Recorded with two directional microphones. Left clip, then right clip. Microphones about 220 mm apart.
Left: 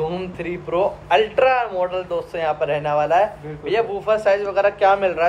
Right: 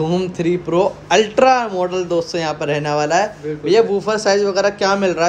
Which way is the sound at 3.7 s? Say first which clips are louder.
Right 4 dB; 15° right (ahead or behind).